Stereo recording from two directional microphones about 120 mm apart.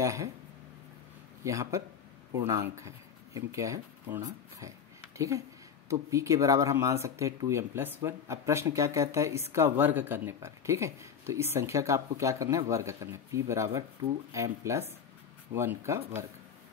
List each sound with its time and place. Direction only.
0.0 s speech: 25° right (ahead or behind)
1.4 s speech: 25° right (ahead or behind)